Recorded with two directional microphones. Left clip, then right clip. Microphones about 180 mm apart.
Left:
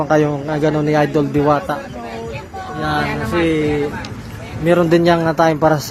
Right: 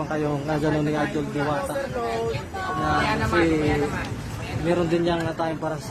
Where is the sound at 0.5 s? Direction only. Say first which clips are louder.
Left 6 dB; 15° left (ahead or behind).